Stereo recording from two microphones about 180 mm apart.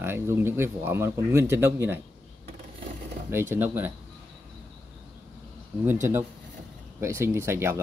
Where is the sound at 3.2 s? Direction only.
15° right (ahead or behind).